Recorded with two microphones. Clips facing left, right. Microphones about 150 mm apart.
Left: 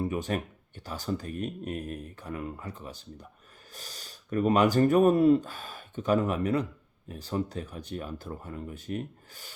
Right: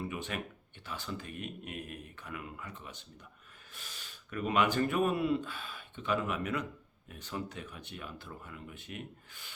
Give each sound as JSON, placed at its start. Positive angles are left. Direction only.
{"t": 0.0, "sound": "speech", "side_deg": 40}